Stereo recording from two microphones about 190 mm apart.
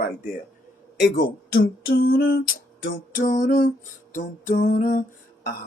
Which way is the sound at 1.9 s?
55° left (ahead or behind).